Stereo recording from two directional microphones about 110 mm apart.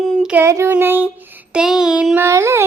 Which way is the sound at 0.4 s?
25° right (ahead or behind).